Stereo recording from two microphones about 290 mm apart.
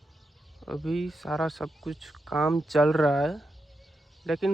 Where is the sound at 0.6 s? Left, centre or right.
Centre.